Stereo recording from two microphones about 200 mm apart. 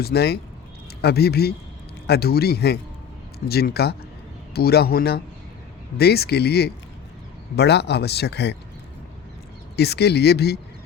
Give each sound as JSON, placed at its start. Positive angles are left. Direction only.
{"t": 0.0, "sound": "a man's voice", "side_deg": 50}
{"t": 9.7, "sound": "a man's voice", "side_deg": 55}